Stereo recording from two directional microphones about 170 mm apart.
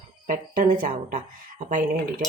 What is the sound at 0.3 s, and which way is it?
Speech, 55° right (ahead or behind).